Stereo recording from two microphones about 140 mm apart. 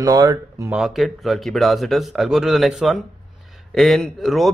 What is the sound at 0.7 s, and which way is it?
A man's voice, centre (ahead or behind).